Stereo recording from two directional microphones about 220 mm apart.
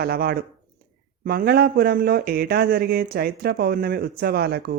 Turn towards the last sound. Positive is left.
turn(degrees=-45)  # may be behind; listen again after turning